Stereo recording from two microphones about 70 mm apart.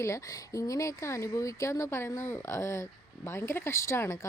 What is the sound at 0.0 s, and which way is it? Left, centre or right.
Speech, left.